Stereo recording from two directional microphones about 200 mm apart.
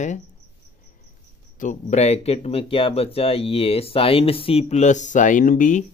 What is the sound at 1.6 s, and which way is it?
Speech, 40° left (ahead or behind).